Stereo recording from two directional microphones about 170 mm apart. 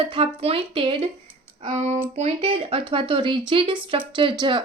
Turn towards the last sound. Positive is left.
turn(degrees=-30)  # may be behind; listen again after turning